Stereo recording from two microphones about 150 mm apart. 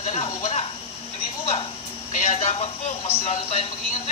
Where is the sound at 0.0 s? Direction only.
45° left (ahead or behind).